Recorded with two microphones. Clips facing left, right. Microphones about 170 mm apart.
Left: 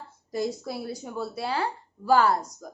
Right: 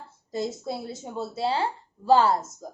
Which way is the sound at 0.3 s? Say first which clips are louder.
Even; 25° right (ahead or behind).